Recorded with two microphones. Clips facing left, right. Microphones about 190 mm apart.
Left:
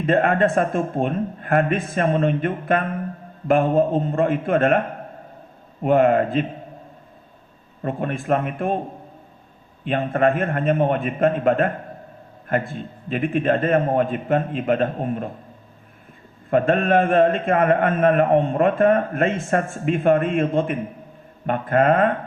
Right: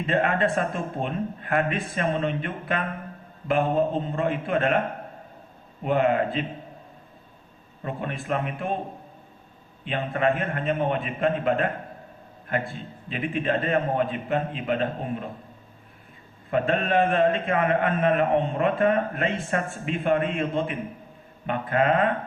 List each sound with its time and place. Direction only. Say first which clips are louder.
0.0 s a man's voice: left 5 dB; 45° left (ahead or behind)
5.8 s a man's voice: left 6 dB; 45° left (ahead or behind)
7.8 s a man's voice: left 6 dB; 45° left (ahead or behind)
9.8 s a man's voice: left 5 dB; 45° left (ahead or behind)
16.5 s a man's voice: left 6 dB; 45° left (ahead or behind)